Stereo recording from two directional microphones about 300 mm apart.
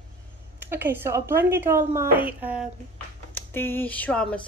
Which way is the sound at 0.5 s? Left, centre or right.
Centre.